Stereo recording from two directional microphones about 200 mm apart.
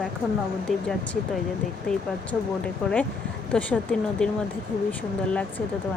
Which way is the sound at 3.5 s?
5° left (ahead or behind).